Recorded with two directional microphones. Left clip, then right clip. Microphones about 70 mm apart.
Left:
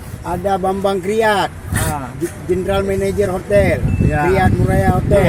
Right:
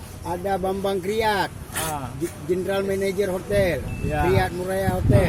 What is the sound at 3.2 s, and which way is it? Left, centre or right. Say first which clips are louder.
Speech: left 10 dB; right.